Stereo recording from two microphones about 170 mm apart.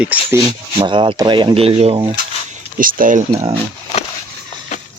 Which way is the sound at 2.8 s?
55° right (ahead or behind).